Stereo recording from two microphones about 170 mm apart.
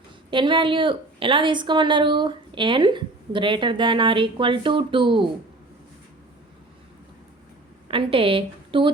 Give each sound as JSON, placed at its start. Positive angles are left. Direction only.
{"t": 0.3, "sound": "a woman's voice", "side_deg": -30}
{"t": 7.9, "sound": "a woman's voice", "side_deg": -30}